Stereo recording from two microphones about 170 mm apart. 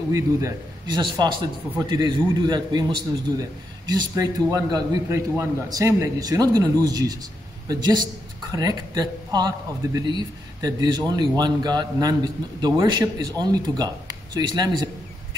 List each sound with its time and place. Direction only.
0.1 s a man's voice: 20° right (ahead or behind)